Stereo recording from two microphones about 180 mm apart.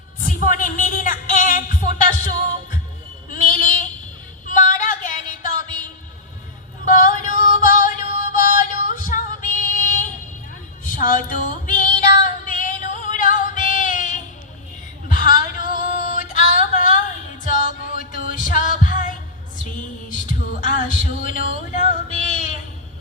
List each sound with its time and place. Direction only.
0.3 s music: 50° left (ahead or behind)
3.2 s a sound: 45° left (ahead or behind)
4.4 s female singing: 45° left (ahead or behind)
6.8 s music: 45° left (ahead or behind)
10.8 s a sound: 45° left (ahead or behind)
12.5 s music: 45° left (ahead or behind)
15.0 s female singing: 50° left (ahead or behind)
17.4 s music: 45° left (ahead or behind)
19.6 s a sound: 45° left (ahead or behind)